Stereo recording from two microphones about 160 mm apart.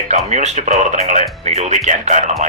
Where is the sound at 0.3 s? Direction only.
45° right (ahead or behind).